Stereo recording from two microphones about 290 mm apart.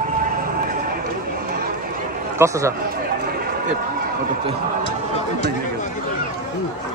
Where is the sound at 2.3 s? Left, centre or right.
Centre.